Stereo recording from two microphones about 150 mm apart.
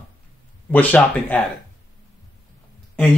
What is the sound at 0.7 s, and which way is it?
Speech, 10° left (ahead or behind).